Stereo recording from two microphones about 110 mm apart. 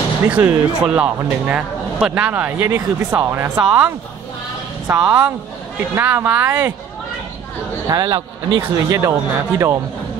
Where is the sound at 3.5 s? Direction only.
10° right (ahead or behind).